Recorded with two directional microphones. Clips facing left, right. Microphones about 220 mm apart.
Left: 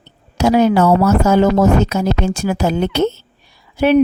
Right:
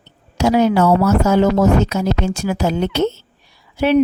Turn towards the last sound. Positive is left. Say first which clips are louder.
# left 2 dB
turn(degrees=50)  # may be behind; listen again after turning